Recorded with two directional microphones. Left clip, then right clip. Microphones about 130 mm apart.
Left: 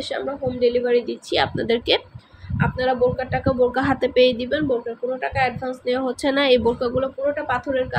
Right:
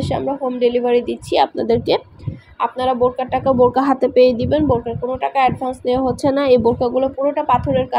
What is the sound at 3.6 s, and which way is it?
Speech, 20° right (ahead or behind).